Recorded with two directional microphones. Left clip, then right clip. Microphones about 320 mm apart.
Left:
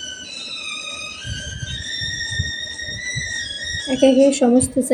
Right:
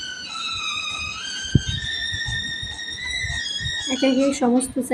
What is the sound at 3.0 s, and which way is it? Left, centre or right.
Music, right.